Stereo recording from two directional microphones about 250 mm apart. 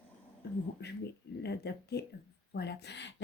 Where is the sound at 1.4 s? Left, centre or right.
Left.